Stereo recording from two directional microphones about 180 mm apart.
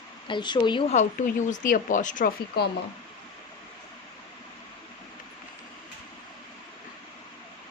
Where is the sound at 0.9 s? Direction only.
40° left (ahead or behind).